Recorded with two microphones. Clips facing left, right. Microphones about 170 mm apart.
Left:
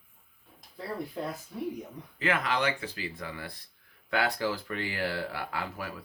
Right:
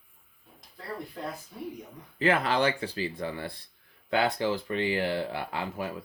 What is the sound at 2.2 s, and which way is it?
Speech, 30° right (ahead or behind).